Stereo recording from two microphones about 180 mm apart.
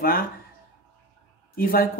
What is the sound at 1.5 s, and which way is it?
Speech, 55° left (ahead or behind).